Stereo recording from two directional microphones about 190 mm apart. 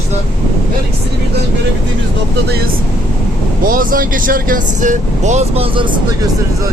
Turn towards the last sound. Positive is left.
turn(degrees=-30)  # may be behind; listen again after turning